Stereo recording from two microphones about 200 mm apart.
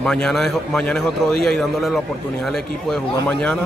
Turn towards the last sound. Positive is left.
turn(degrees=5)  # may be behind; listen again after turning